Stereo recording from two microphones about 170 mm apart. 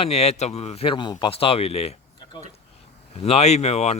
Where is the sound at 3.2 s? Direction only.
40° left (ahead or behind).